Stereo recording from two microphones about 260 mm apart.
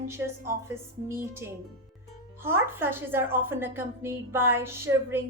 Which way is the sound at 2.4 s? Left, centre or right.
Centre.